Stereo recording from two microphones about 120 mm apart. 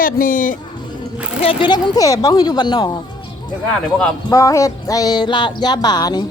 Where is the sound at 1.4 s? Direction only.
45° left (ahead or behind).